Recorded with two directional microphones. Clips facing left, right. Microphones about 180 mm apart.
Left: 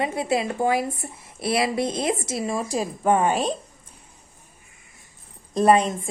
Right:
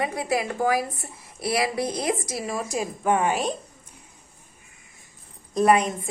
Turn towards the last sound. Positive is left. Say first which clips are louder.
# left 2 dB
turn(degrees=25)  # may be behind; listen again after turning